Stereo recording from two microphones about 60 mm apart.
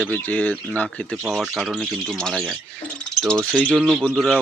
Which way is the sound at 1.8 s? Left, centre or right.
Centre.